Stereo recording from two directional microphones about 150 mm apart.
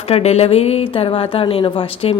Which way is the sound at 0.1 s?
45° left (ahead or behind).